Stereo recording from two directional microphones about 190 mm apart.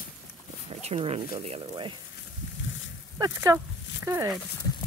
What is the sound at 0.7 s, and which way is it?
Speech, 30° right (ahead or behind).